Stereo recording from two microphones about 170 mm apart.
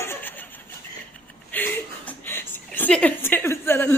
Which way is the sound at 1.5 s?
10° left (ahead or behind).